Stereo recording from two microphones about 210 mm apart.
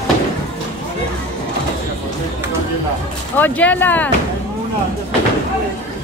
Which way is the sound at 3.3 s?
10° left (ahead or behind).